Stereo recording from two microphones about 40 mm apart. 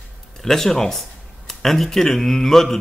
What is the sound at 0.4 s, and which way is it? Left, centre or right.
Speech, centre.